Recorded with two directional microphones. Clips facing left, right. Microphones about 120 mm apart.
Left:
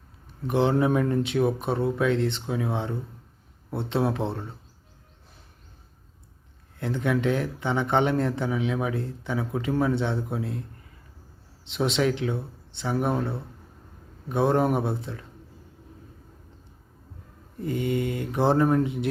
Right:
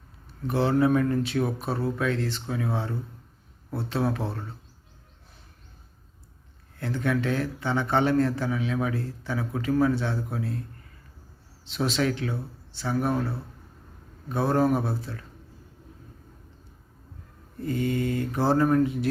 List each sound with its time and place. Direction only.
0.4 s a man's voice: 20° left (ahead or behind)
6.7 s a man's voice: 20° left (ahead or behind)
11.7 s a man's voice: 20° left (ahead or behind)
14.3 s a man's voice: 20° left (ahead or behind)
17.6 s a man's voice: 20° left (ahead or behind)